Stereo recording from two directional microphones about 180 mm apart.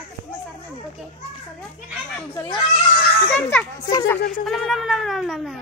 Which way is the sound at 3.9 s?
20° left (ahead or behind).